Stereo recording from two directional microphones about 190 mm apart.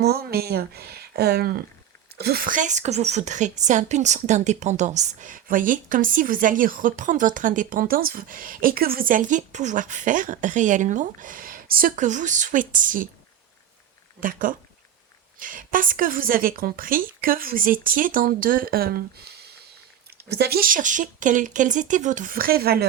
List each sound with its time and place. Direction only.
0.0 s a woman's voice: 55° right (ahead or behind)
14.2 s a woman's voice: 45° right (ahead or behind)